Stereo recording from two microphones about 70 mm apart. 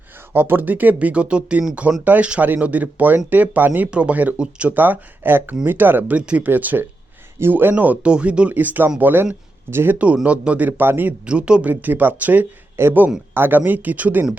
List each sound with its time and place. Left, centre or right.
0.3 s speech: right
6.1 s speech: centre
11.3 s speech: centre
11.7 s speech: right